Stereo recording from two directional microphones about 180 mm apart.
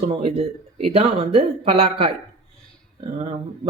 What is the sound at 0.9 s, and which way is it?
Speech, 35° right (ahead or behind).